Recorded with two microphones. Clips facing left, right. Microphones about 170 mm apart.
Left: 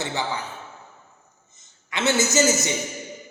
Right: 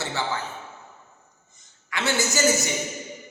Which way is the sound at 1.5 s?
20° left (ahead or behind).